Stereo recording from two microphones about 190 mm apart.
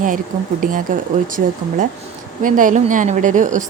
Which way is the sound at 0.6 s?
45° right (ahead or behind).